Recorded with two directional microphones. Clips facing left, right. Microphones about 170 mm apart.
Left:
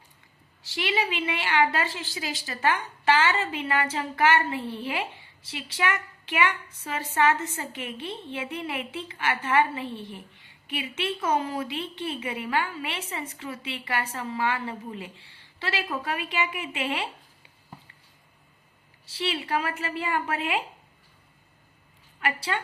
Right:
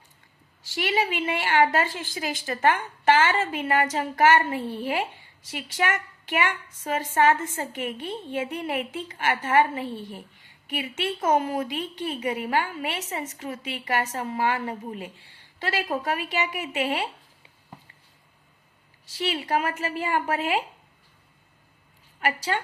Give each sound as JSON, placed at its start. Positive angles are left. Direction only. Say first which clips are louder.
{"t": 0.6, "sound": "a woman's voice", "louder": "right 2 dB", "side_deg": -45}
{"t": 19.1, "sound": "a woman's voice", "louder": "right 2 dB", "side_deg": -45}
{"t": 22.2, "sound": "a woman's voice", "louder": "right 3 dB", "side_deg": -40}